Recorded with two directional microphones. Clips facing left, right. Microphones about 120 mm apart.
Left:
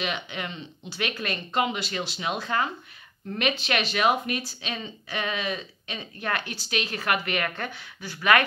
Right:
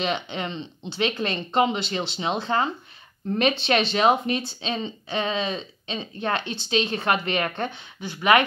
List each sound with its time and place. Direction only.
0.0 s speech: 30° right (ahead or behind)